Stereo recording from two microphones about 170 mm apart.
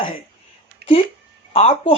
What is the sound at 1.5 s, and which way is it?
Speech, 35° left (ahead or behind).